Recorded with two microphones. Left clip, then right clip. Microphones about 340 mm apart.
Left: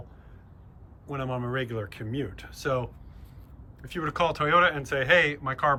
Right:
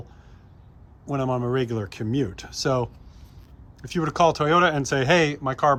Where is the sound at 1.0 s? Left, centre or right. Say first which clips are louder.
Right 7 dB; centre.